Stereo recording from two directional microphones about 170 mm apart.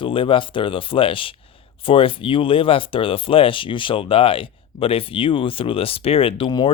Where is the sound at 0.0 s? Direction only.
30° left (ahead or behind).